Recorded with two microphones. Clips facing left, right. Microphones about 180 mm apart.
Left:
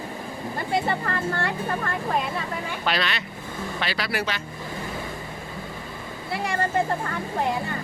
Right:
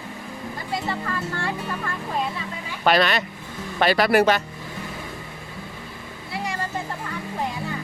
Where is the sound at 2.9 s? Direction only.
45° right (ahead or behind).